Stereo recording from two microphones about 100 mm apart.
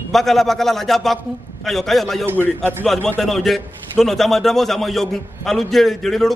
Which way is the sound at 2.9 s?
Centre (ahead or behind).